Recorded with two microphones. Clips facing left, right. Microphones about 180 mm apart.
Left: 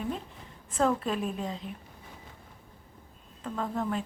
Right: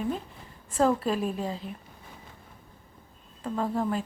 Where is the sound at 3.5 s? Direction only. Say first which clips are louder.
Right 4 dB; 30° right (ahead or behind).